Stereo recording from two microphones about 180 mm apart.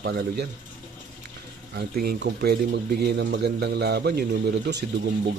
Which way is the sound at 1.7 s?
65° right (ahead or behind).